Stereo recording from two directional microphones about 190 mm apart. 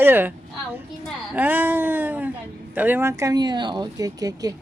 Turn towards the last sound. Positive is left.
turn(degrees=-20)  # may be behind; listen again after turning